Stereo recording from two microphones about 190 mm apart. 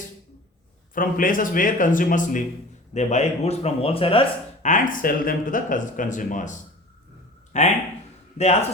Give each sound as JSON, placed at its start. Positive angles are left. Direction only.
{"t": 0.9, "sound": "speech", "side_deg": 45}
{"t": 4.7, "sound": "speech", "side_deg": 45}